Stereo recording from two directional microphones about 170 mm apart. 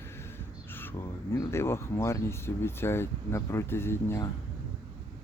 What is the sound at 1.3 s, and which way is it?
Speech, 15° left (ahead or behind).